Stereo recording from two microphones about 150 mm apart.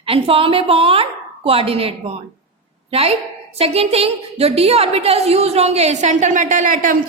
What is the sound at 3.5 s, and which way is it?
A woman's voice, 40° right (ahead or behind).